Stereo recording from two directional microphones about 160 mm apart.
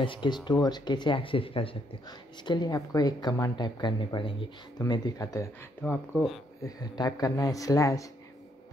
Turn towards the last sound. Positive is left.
turn(degrees=20)  # may be behind; listen again after turning